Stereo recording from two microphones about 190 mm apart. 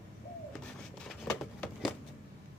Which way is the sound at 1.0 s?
Centre (ahead or behind).